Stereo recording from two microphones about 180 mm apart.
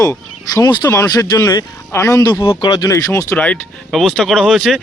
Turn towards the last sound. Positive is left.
turn(degrees=0)  # may be behind; listen again after turning